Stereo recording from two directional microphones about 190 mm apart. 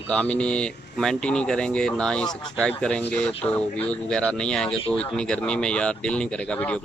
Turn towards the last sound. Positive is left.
turn(degrees=5)  # may be behind; listen again after turning